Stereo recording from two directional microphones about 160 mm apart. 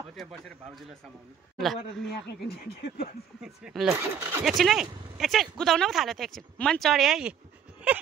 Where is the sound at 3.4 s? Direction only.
5° right (ahead or behind).